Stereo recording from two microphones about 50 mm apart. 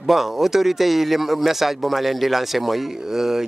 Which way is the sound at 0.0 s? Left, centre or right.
Centre.